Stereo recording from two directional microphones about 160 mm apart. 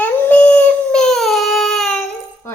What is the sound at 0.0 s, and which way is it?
Dog, 10° left (ahead or behind).